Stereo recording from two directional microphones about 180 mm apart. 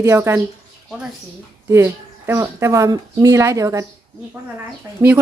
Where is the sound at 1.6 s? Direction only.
15° right (ahead or behind).